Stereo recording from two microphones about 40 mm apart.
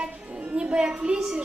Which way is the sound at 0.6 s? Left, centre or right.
Right.